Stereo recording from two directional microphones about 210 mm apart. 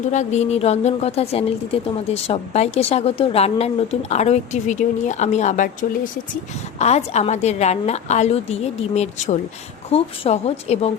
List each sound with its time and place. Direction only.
0.1 s a woman's voice: 35° left (ahead or behind)
6.7 s a woman's voice: 30° left (ahead or behind)